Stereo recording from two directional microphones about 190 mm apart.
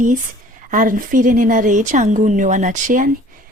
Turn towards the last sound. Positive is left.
turn(degrees=-45)  # may be behind; listen again after turning